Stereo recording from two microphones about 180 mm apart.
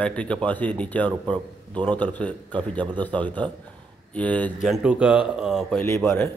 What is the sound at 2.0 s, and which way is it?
A man's voice, 10° left (ahead or behind).